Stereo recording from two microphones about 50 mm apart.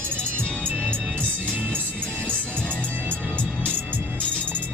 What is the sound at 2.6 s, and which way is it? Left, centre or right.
Music, left.